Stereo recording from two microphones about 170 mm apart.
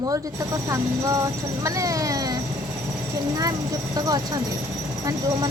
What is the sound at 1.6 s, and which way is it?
Speech, 20° right (ahead or behind).